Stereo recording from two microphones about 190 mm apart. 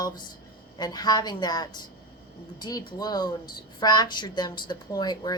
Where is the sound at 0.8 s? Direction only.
20° left (ahead or behind).